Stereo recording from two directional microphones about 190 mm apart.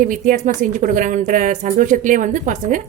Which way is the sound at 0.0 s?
45° right (ahead or behind).